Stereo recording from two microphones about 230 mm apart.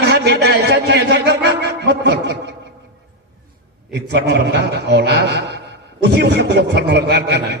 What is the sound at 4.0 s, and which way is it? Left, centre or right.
A man's voice, right.